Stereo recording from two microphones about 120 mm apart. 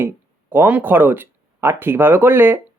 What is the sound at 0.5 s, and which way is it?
Speech, 15° right (ahead or behind).